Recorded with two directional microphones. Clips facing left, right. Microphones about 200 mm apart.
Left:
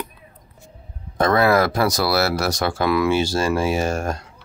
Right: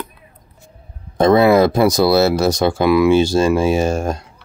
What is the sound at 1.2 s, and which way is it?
Speech, 20° right (ahead or behind).